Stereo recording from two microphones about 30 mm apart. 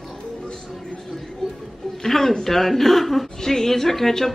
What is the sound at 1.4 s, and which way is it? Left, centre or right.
Music, centre.